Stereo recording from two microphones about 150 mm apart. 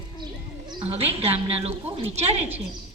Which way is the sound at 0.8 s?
40° right (ahead or behind).